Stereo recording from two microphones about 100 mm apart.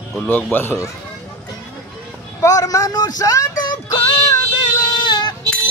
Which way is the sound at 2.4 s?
35° left (ahead or behind).